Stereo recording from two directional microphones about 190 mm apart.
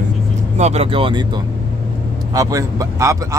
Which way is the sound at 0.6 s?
35° right (ahead or behind).